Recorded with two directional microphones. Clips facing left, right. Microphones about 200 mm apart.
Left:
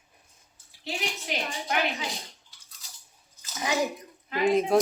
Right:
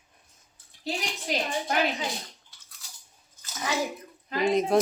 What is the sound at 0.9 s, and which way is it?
Speech, 35° right (ahead or behind).